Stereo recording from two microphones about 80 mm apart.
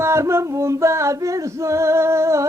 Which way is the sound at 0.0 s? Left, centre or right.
Right.